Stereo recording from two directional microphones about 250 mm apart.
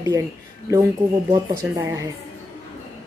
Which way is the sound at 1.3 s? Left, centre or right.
Centre.